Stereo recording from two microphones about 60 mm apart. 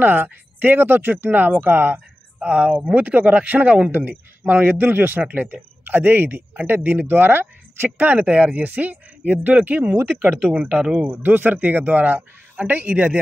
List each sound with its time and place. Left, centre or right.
0.0 s speech: right
2.4 s a man's voice: right
8.0 s a man's voice: right